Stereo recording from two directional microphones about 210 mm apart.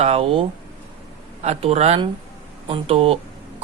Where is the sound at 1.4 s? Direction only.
30° right (ahead or behind).